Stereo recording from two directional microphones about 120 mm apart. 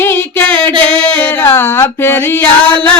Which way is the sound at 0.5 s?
45° right (ahead or behind).